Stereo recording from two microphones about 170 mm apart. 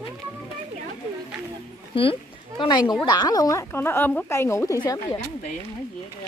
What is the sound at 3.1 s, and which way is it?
Speech, 25° left (ahead or behind).